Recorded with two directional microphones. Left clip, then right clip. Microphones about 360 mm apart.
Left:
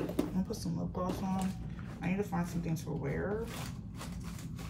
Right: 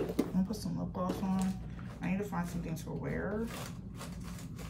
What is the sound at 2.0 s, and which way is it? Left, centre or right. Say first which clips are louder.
Speech: left 1 dB; centre.